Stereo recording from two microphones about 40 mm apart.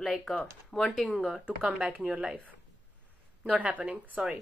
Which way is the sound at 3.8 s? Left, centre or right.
Right.